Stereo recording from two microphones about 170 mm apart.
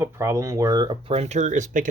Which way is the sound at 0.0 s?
15° right (ahead or behind).